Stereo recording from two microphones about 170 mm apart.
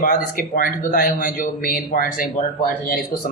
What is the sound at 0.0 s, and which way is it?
A man's voice, 55° left (ahead or behind).